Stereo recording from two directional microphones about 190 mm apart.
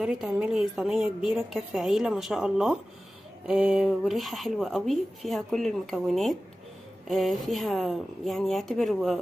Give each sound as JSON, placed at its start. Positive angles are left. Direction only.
{"t": 0.0, "sound": "speech", "side_deg": 0}